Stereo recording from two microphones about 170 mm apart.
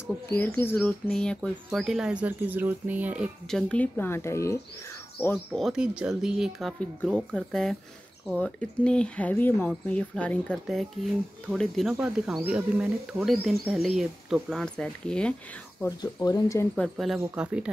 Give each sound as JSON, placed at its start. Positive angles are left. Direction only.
{"t": 0.0, "sound": "speech", "side_deg": 15}
{"t": 3.4, "sound": "speech", "side_deg": 5}
{"t": 16.0, "sound": "speech", "side_deg": 20}
{"t": 16.9, "sound": "speech", "side_deg": -5}